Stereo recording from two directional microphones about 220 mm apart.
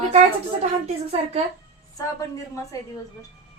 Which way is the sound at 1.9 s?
15° left (ahead or behind).